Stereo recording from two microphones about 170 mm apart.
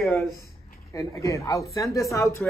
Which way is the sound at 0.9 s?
20° left (ahead or behind).